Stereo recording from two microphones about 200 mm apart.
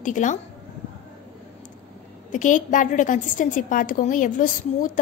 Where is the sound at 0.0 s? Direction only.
40° left (ahead or behind).